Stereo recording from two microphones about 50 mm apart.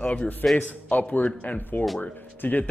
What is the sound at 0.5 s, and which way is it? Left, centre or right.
Speech, left.